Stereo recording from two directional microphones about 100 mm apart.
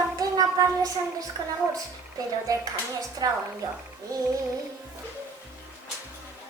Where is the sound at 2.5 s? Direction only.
35° right (ahead or behind).